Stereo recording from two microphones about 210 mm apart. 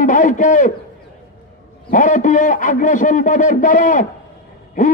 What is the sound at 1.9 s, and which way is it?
A man's voice, 35° left (ahead or behind).